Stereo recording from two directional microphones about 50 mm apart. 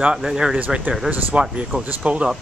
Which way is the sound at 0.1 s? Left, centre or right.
Centre.